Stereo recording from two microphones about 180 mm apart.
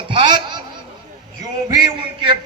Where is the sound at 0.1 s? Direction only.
25° right (ahead or behind).